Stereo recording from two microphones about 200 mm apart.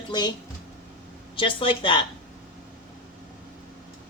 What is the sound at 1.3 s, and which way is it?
Speech, 25° left (ahead or behind).